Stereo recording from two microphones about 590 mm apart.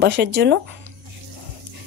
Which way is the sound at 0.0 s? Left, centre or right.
Centre.